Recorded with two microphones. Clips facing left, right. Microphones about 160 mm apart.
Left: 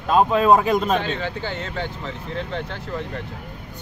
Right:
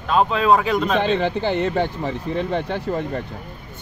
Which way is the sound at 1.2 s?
55° right (ahead or behind).